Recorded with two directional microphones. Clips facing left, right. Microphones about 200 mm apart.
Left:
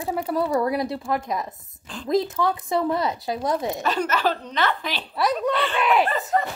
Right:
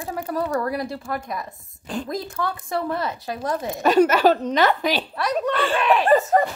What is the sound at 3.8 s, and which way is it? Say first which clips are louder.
Speech: right 11 dB; 45° right (ahead or behind).